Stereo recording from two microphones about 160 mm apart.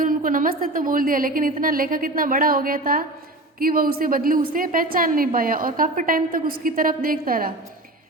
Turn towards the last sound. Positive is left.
turn(degrees=-65)  # may be behind; listen again after turning